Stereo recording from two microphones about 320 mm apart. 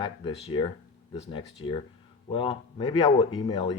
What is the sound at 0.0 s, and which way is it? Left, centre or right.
Speech, centre.